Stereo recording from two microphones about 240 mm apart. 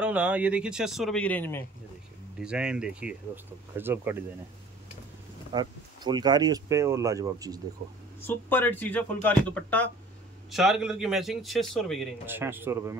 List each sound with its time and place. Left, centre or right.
0.0 s a man's voice: centre
2.4 s a man's voice: centre
5.5 s speech: centre
8.2 s a man's voice: centre